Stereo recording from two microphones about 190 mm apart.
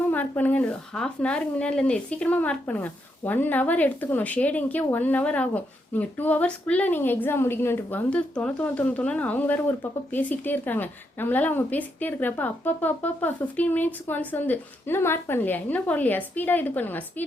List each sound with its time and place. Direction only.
0.1 s speech: 10° left (ahead or behind)